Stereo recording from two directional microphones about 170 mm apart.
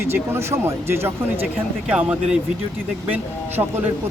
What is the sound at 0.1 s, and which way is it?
Speech, 15° right (ahead or behind).